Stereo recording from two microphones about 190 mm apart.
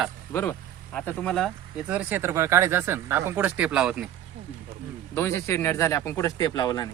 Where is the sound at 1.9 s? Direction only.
10° right (ahead or behind).